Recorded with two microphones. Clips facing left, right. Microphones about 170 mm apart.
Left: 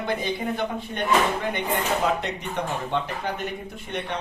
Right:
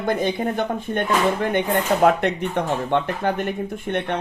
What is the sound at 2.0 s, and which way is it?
Speech, 55° right (ahead or behind).